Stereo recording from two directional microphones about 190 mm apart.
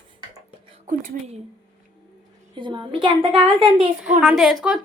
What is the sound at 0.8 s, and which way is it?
Speech, 45° right (ahead or behind).